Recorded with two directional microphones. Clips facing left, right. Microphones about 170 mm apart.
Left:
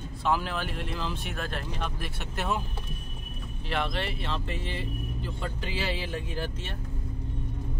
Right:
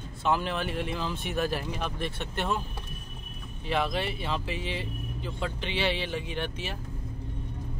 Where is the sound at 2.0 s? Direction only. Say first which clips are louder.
Right 2 dB; 5° left (ahead or behind).